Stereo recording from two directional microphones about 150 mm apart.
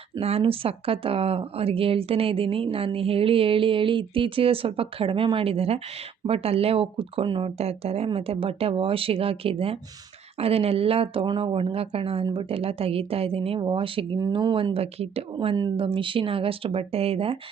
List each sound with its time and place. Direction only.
0.2 s speech: 40° right (ahead or behind)